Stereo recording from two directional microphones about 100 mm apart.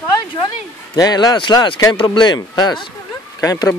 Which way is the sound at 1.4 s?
50° left (ahead or behind).